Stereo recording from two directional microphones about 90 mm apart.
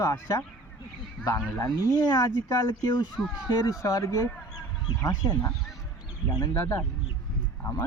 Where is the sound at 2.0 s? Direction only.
55° left (ahead or behind).